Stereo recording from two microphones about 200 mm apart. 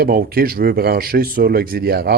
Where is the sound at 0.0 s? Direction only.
50° right (ahead or behind).